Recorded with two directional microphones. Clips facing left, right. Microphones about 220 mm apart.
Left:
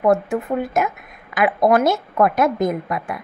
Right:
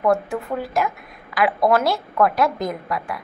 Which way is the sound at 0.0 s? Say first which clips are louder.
Left 3 dB; 20° left (ahead or behind).